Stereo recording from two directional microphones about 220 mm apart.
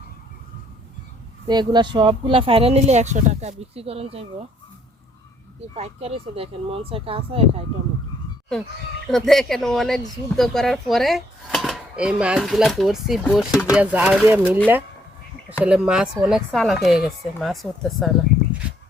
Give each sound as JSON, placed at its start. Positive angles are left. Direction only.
{"t": 1.5, "sound": "speech", "side_deg": -20}
{"t": 5.7, "sound": "speech", "side_deg": -30}
{"t": 9.0, "sound": "speech", "side_deg": 0}
{"t": 15.6, "sound": "speech", "side_deg": -5}